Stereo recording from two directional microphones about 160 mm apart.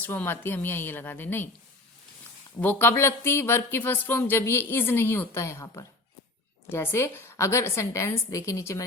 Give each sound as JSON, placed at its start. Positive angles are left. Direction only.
{"t": 0.0, "sound": "speech", "side_deg": 10}
{"t": 2.6, "sound": "speech", "side_deg": 10}